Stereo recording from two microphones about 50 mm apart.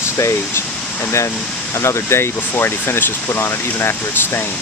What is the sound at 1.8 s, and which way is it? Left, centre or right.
Speech, left.